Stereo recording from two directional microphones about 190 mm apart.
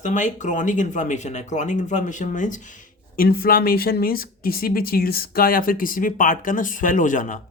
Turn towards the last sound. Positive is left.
turn(degrees=40)  # may be behind; listen again after turning